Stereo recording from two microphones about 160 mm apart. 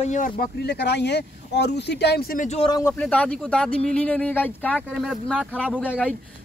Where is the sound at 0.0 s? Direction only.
55° left (ahead or behind); by 2.4 s 80° left.